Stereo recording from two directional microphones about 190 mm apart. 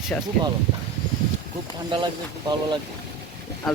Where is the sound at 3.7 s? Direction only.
Centre (ahead or behind).